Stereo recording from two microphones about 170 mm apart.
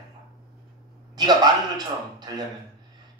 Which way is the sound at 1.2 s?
25° right (ahead or behind).